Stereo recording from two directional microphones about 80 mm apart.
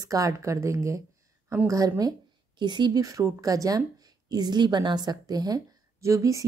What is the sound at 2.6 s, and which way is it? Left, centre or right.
Speech, right.